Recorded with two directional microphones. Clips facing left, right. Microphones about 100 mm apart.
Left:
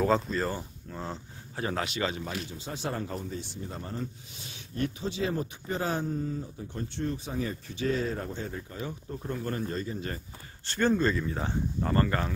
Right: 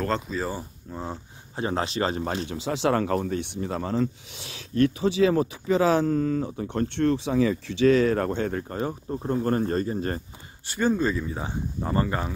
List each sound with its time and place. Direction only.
0.0 s speech: centre (ahead or behind)
0.9 s speech: 15° right (ahead or behind)
1.7 s speech: 30° right (ahead or behind)
2.4 s speech: 90° right; by 8.7 s 65° right (ahead or behind)
8.7 s speech: 35° right (ahead or behind)
10.7 s speech: 10° right (ahead or behind)